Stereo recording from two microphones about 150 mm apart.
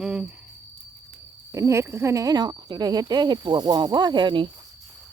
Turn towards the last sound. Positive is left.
turn(degrees=-35)  # may be behind; listen again after turning